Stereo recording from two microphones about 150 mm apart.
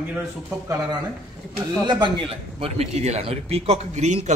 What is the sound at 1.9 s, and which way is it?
A man's voice, 35° right (ahead or behind).